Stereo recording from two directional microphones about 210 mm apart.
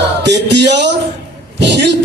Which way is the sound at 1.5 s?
55° right (ahead or behind).